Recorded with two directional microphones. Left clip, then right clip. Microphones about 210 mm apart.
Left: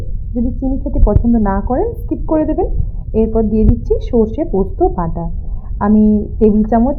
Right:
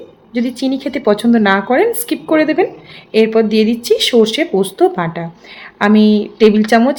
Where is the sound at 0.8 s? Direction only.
30° right (ahead or behind).